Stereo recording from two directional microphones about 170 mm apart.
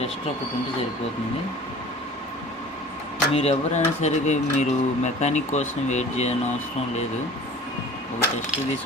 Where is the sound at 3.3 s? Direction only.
40° left (ahead or behind).